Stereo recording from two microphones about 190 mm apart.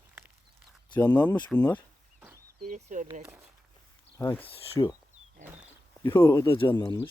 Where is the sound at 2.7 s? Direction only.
40° right (ahead or behind).